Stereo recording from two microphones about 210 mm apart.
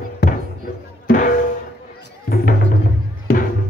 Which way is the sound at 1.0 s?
40° left (ahead or behind).